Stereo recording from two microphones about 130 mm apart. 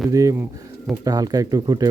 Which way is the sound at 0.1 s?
25° right (ahead or behind).